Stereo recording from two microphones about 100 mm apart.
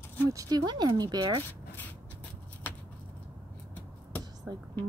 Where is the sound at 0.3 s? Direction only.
35° right (ahead or behind).